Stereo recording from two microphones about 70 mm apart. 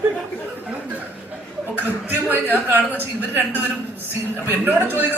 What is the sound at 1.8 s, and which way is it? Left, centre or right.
A woman's voice, right.